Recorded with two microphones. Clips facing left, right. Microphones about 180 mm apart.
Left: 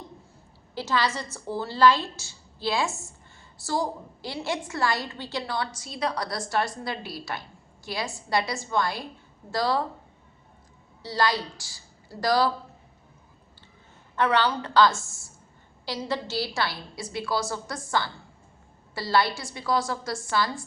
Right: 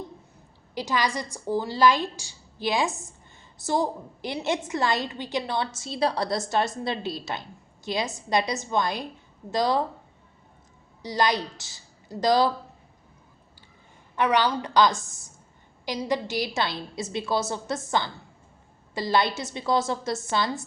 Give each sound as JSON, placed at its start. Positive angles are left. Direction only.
{"t": 0.7, "sound": "a woman's voice", "side_deg": -15}
{"t": 11.0, "sound": "speech", "side_deg": -20}
{"t": 14.2, "sound": "a woman's voice", "side_deg": -15}